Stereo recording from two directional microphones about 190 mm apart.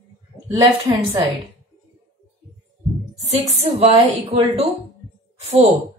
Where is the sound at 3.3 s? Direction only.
35° right (ahead or behind).